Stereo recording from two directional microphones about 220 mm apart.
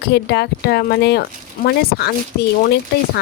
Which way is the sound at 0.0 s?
50° left (ahead or behind).